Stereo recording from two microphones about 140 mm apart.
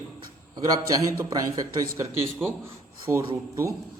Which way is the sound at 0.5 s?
25° right (ahead or behind).